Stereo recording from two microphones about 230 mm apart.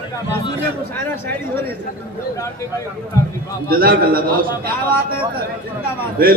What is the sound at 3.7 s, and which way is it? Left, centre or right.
Speech, right.